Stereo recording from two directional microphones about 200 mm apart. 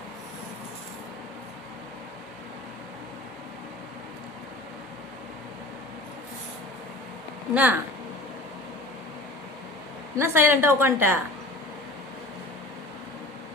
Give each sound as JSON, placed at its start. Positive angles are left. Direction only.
{"t": 7.5, "sound": "a woman's voice", "side_deg": -10}
{"t": 10.2, "sound": "a woman's voice", "side_deg": -10}